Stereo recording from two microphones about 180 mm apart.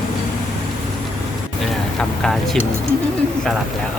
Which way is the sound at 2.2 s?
Centre (ahead or behind).